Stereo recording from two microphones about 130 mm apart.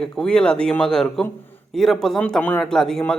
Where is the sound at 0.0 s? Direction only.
5° left (ahead or behind).